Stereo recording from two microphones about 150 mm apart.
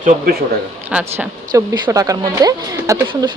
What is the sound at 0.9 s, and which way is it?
Speech, 5° right (ahead or behind).